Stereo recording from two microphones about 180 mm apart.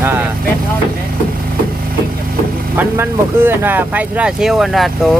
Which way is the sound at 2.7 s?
10° right (ahead or behind).